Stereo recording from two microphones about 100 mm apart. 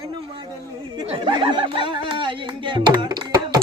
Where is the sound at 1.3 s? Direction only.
55° right (ahead or behind).